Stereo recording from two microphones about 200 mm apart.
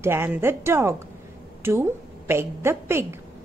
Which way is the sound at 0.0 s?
10° right (ahead or behind).